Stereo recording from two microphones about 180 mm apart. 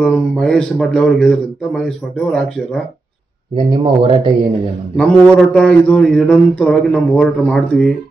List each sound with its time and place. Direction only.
0.0 s a man's voice: 5° left (ahead or behind)
3.5 s speech: 30° right (ahead or behind)
4.9 s a man's voice: 5° left (ahead or behind)